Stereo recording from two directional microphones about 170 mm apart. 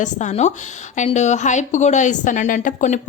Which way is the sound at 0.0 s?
45° left (ahead or behind).